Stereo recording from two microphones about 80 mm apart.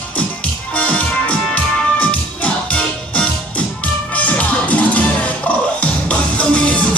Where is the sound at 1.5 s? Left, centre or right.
Centre.